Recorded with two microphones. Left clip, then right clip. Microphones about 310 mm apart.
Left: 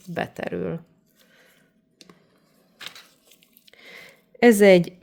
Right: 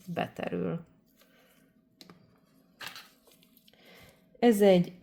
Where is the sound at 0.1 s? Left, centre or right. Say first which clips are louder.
Left 5 dB; left.